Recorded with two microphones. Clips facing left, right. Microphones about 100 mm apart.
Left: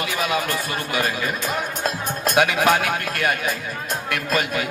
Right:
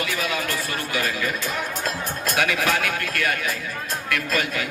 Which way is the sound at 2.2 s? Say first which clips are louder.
Left 5 dB; 20° left (ahead or behind).